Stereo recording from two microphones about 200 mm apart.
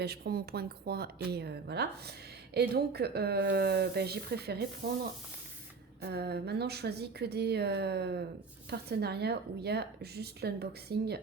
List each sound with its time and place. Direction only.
0.0 s a woman's voice: 55° right (ahead or behind)
6.0 s a woman's voice: 55° right (ahead or behind)